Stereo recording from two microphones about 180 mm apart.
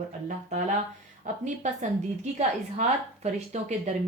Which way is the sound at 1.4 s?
40° right (ahead or behind).